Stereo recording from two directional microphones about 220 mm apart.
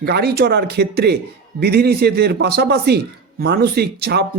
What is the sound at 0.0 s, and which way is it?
A man's voice, 45° right (ahead or behind).